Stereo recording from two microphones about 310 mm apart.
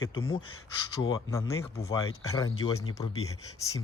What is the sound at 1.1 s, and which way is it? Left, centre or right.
Speech, centre.